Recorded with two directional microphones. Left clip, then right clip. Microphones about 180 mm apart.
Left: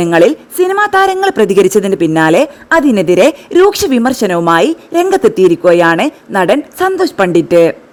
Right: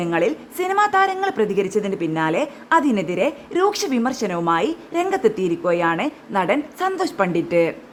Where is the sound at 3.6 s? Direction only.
45° left (ahead or behind).